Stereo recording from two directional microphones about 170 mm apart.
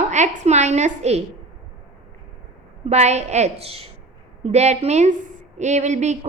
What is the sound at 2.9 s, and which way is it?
A woman's voice, 40° right (ahead or behind).